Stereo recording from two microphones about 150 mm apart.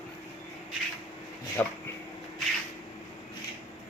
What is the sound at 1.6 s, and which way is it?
Speech, 10° left (ahead or behind).